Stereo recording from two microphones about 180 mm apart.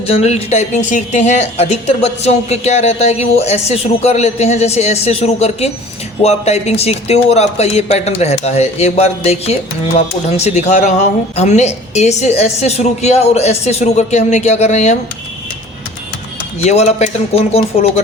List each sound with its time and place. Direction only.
0.1 s a woman's voice: 35° left (ahead or behind)
16.6 s a woman's voice: 40° left (ahead or behind)